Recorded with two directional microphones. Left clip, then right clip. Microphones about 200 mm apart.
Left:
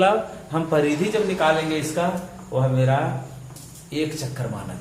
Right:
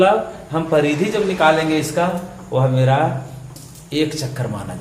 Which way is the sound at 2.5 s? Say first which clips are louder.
Right 5 dB; 30° right (ahead or behind).